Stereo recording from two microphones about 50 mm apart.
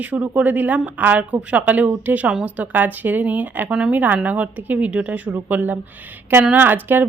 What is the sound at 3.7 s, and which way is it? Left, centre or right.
Speech, centre.